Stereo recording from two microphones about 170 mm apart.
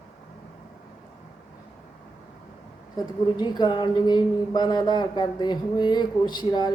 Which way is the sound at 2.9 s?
25° left (ahead or behind).